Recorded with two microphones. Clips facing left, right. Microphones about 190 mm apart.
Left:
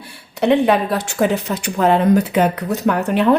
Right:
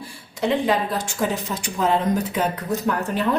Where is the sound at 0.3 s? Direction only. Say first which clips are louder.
Left 6 dB; 65° left (ahead or behind).